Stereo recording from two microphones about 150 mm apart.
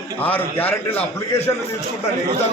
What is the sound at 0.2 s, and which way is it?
A man's voice, 10° left (ahead or behind).